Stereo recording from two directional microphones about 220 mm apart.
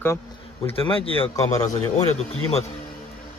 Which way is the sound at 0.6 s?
25° left (ahead or behind).